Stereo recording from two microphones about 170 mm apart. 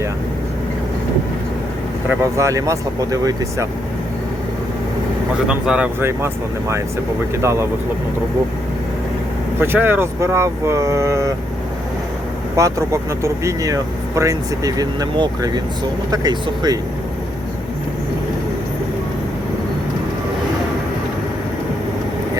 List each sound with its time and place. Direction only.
2.0 s speech: 15° right (ahead or behind)
5.5 s speech: 5° right (ahead or behind)
9.6 s speech: 10° right (ahead or behind)
12.5 s speech: 20° right (ahead or behind)